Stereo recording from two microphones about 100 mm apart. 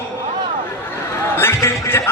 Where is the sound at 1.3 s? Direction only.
25° left (ahead or behind).